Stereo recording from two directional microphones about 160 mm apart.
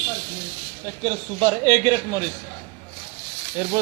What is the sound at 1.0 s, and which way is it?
A man's voice, 30° right (ahead or behind).